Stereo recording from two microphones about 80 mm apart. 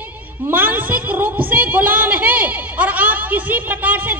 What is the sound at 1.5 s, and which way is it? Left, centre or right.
A man's voice, right.